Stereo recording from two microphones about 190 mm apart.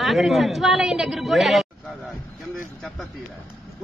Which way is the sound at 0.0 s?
Centre (ahead or behind).